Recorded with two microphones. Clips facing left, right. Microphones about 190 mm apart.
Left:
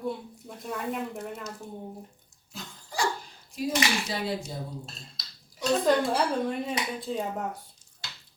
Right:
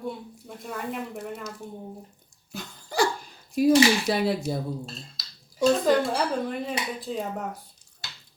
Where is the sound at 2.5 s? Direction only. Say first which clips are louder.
Right 8 dB; 65° right (ahead or behind).